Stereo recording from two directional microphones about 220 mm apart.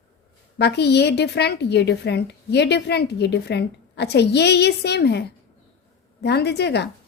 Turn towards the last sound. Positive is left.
turn(degrees=50)  # may be behind; listen again after turning